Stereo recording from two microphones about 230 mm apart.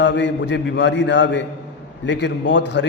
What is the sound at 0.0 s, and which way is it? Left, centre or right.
A man's voice, left.